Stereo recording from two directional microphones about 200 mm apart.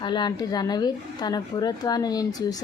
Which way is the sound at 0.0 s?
20° left (ahead or behind).